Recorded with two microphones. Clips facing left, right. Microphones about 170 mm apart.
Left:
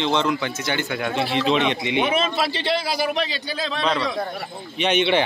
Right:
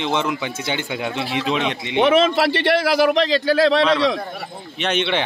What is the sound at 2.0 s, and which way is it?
Speech, 90° right.